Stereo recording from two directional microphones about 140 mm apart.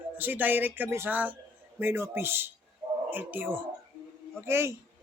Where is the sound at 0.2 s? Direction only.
15° right (ahead or behind).